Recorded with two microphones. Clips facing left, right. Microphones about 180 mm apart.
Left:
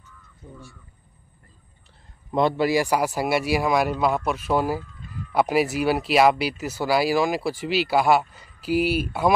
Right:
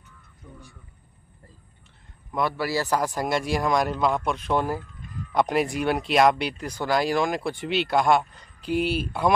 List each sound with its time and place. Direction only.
0.4 s speech: 25° left (ahead or behind)
2.3 s speech: 20° left (ahead or behind); by 9.3 s 5° left (ahead or behind)